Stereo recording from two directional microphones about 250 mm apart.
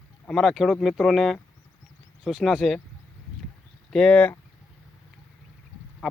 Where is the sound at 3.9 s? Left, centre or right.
Centre.